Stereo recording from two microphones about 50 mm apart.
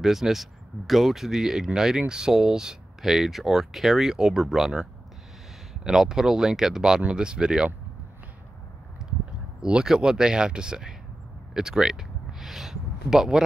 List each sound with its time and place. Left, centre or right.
0.0 s speech: centre
9.6 s speech: centre
11.5 s a sound: centre